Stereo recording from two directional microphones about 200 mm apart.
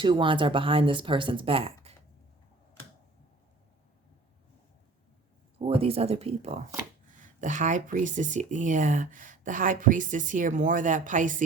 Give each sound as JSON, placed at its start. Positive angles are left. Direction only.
{"t": 0.0, "sound": "speech", "side_deg": -25}
{"t": 5.5, "sound": "speech", "side_deg": -30}